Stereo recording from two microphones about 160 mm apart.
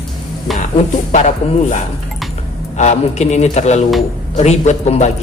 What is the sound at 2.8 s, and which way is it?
A man's voice, 45° left (ahead or behind).